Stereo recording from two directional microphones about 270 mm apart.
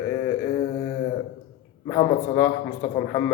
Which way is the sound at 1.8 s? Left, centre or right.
Centre.